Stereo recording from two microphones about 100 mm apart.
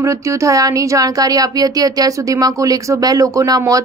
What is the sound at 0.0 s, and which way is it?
Speech, 30° right (ahead or behind).